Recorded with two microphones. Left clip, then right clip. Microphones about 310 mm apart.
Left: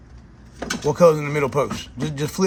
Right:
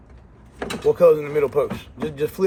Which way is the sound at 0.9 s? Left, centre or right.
Left.